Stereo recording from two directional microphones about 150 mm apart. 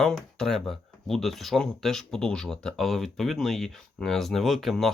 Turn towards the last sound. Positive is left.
turn(degrees=0)  # may be behind; listen again after turning